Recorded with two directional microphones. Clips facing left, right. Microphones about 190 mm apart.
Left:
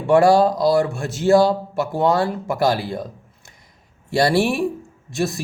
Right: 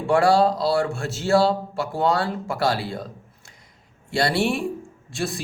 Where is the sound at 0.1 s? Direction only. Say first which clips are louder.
Left 4 dB; 20° left (ahead or behind).